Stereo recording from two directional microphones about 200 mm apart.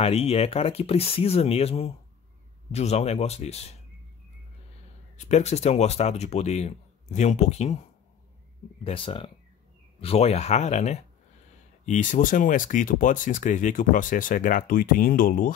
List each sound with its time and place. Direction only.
0.0 s speech: 30° left (ahead or behind)
5.1 s speech: 35° left (ahead or behind)
8.8 s speech: 25° left (ahead or behind); by 15.5 s 45° left (ahead or behind)